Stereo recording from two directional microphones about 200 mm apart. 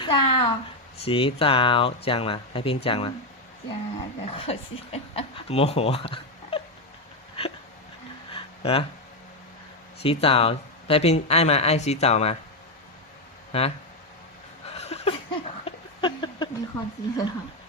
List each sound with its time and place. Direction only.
0.0 s speech: 25° left (ahead or behind)
7.4 s hiccup: 30° left (ahead or behind)
8.3 s a sound: 30° left (ahead or behind)
10.0 s speech: 30° left (ahead or behind)
13.5 s speech: 30° left (ahead or behind)
14.8 s a sound: 30° left (ahead or behind)